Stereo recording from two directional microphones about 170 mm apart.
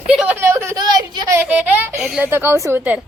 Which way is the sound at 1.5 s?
5° right (ahead or behind).